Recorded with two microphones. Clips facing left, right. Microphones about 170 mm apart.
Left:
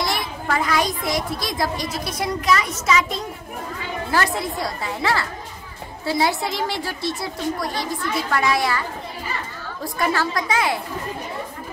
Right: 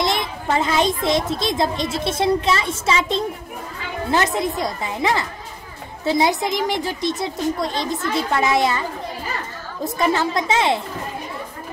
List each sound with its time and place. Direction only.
0.0 s a child's voice: 20° right (ahead or behind)
9.8 s a child's voice: 20° right (ahead or behind)